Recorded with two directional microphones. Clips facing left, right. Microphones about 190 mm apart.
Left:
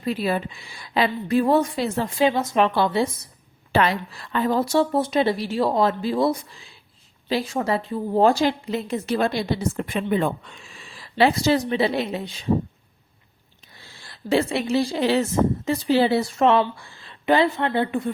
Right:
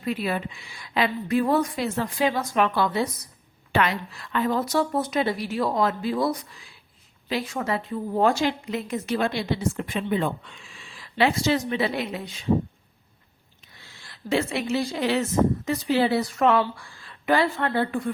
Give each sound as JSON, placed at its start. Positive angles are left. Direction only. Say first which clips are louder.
{"t": 0.0, "sound": "a woman's voice", "louder": "left 3 dB", "side_deg": 35}
{"t": 9.9, "sound": "a woman's voice", "louder": "left 4 dB", "side_deg": 50}
{"t": 13.7, "sound": "speech", "louder": "left 3 dB", "side_deg": 35}